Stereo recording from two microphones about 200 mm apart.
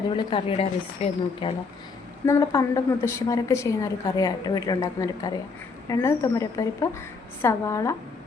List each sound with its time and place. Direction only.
0.3 s a woman's voice: 25° left (ahead or behind)
2.2 s a woman's voice: 15° left (ahead or behind)